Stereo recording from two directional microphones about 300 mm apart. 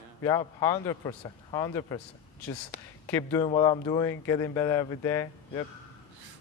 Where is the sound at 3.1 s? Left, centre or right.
Centre.